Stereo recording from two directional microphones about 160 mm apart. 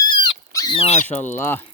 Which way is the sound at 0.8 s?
40° left (ahead or behind).